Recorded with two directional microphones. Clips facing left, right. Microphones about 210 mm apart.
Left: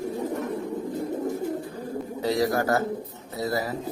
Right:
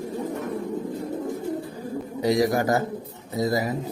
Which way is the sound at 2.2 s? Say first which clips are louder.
Right 3 dB; 15° right (ahead or behind).